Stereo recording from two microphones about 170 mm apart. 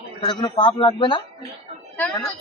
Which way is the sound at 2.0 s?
10° left (ahead or behind).